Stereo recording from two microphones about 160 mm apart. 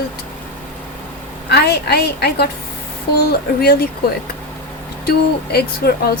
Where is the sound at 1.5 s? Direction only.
90° left.